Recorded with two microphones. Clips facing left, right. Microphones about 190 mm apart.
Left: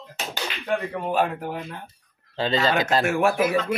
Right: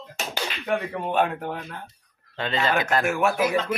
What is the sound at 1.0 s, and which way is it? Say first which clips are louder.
Speech: even; centre (ahead or behind).